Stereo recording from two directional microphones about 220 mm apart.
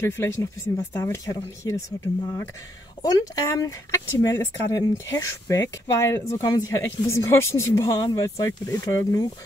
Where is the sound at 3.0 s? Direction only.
15° left (ahead or behind).